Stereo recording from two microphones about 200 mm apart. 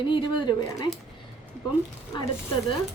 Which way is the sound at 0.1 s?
25° left (ahead or behind).